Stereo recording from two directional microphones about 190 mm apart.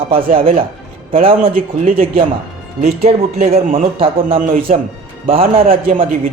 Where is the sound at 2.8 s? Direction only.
35° right (ahead or behind).